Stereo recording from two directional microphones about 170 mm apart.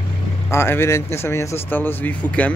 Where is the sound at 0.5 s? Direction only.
15° left (ahead or behind).